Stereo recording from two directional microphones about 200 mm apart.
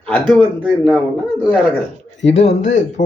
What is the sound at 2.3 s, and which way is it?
Speech, 35° left (ahead or behind).